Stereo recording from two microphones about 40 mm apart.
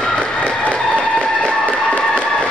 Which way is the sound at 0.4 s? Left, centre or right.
Left.